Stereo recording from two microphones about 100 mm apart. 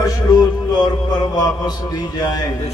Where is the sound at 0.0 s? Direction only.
35° left (ahead or behind).